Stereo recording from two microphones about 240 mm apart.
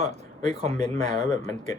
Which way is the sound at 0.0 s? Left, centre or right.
Right.